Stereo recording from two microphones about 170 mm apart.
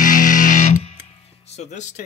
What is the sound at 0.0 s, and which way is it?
Music, 50° left (ahead or behind).